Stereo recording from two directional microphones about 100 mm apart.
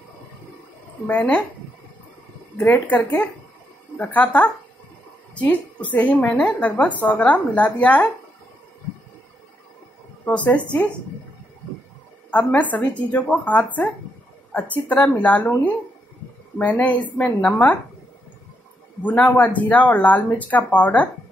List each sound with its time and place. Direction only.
1.0 s a woman's voice: 15° left (ahead or behind)
2.7 s a woman's voice: 15° left (ahead or behind)
5.9 s a woman's voice: 15° left (ahead or behind)
10.2 s a woman's voice: 15° left (ahead or behind)
12.3 s a woman's voice: 15° left (ahead or behind)
19.0 s a woman's voice: 15° left (ahead or behind)